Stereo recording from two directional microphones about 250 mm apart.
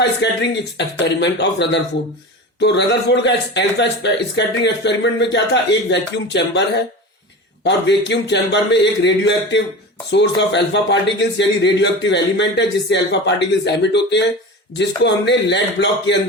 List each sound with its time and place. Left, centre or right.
0.0 s speech: left
7.6 s speech: left